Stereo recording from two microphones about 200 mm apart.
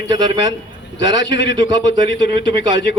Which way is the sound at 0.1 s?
20° right (ahead or behind).